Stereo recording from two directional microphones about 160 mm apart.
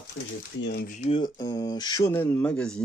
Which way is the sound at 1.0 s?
30° left (ahead or behind).